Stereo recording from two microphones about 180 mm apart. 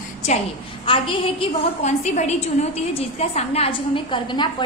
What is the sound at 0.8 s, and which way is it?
A woman's voice, 30° left (ahead or behind).